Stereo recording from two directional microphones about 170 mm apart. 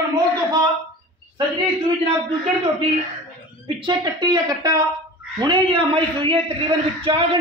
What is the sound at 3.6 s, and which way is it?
A woman's voice, 30° right (ahead or behind).